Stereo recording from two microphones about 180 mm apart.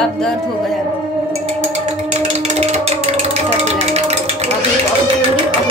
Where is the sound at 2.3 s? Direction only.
40° right (ahead or behind).